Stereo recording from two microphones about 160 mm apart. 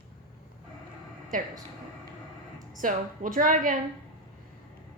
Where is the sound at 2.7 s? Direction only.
55° right (ahead or behind).